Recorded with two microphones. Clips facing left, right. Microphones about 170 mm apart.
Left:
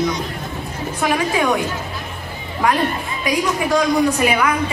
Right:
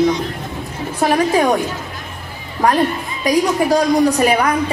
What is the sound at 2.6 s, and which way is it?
A woman's voice, 35° right (ahead or behind).